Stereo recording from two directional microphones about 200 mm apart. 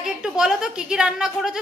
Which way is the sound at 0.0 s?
5° right (ahead or behind).